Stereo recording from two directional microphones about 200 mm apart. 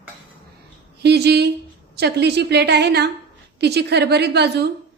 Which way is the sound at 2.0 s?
55° right (ahead or behind).